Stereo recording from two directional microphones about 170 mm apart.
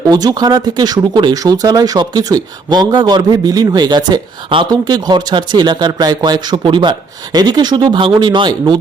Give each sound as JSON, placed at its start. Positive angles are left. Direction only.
{"t": 0.1, "sound": "speech", "side_deg": -25}